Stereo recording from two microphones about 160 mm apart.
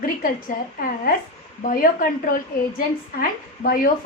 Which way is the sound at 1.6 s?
60° left (ahead or behind).